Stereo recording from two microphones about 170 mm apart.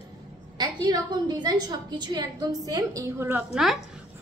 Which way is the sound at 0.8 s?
25° right (ahead or behind).